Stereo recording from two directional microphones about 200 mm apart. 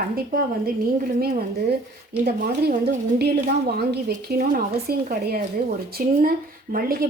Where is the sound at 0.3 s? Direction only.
45° right (ahead or behind).